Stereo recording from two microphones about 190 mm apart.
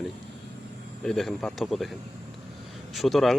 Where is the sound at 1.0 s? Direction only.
Centre (ahead or behind).